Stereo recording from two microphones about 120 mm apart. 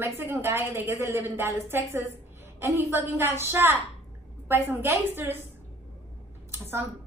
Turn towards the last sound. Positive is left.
turn(degrees=-20)  # may be behind; listen again after turning